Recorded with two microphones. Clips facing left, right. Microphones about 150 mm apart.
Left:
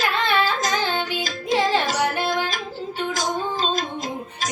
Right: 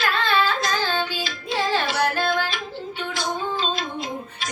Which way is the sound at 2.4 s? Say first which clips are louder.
Left 2 dB; 40° left (ahead or behind).